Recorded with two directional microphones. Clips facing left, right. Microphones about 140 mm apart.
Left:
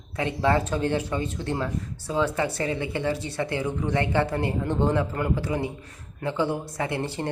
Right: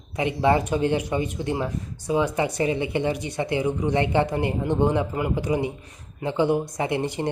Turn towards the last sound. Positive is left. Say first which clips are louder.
# right 3 dB
turn(degrees=-15)  # may be behind; listen again after turning